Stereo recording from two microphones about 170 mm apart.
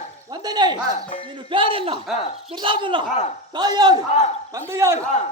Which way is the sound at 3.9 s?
40° left (ahead or behind).